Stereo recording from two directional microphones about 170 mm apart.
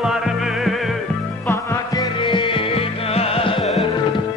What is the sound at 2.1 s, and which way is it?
Music, 30° left (ahead or behind).